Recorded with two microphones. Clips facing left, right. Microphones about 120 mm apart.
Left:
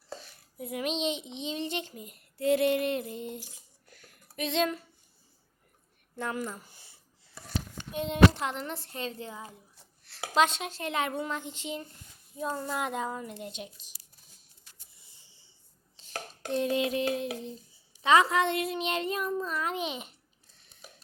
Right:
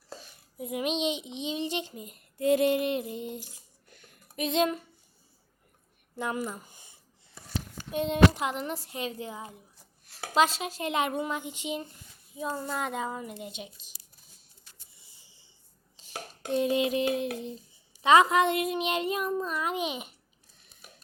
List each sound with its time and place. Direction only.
0.6 s a child's voice: 20° right (ahead or behind)
1.6 s female singing: 20° right (ahead or behind)
3.5 s a sound: 20° right (ahead or behind)
6.1 s speech: 15° right (ahead or behind)
8.3 s a child's voice: 10° right (ahead or behind)
10.3 s speech: centre (ahead or behind)
10.8 s a child's voice: 20° right (ahead or behind)
12.3 s speech: 5° right (ahead or behind)
15.2 s writing: 10° right (ahead or behind)
16.0 s chopping: 10° right (ahead or behind)
18.0 s a child's voice: 20° right (ahead or behind)